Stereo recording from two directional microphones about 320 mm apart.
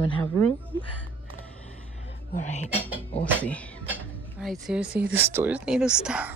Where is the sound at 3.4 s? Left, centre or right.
Centre.